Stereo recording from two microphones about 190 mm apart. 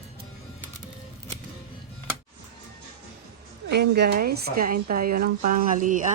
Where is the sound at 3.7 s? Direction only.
60° right (ahead or behind).